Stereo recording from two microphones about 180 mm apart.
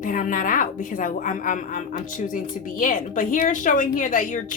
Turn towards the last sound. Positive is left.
turn(degrees=45)  # may be behind; listen again after turning